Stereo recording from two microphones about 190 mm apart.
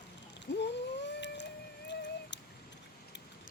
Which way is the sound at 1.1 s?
65° left (ahead or behind).